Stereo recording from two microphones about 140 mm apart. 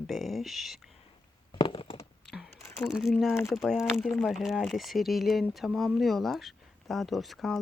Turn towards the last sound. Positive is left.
turn(degrees=0)  # may be behind; listen again after turning